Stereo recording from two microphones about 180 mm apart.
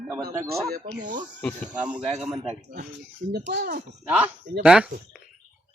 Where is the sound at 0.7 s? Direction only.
45° right (ahead or behind).